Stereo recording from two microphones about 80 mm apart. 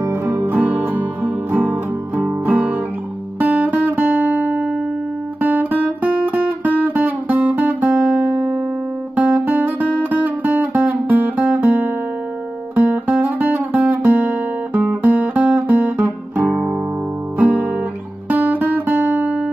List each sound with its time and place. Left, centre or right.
0.5 s music: right
3.3 s guitar: centre
9.1 s music: centre
13.8 s guitar: centre
16.3 s guitar: centre
18.3 s music: right